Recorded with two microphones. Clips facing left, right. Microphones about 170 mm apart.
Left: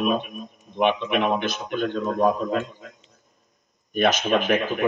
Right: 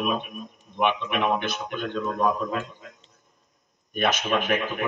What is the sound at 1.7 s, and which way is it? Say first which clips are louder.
Speech: left 6 dB; 40° left (ahead or behind).